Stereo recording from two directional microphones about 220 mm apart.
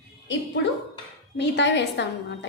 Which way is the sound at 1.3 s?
50° left (ahead or behind).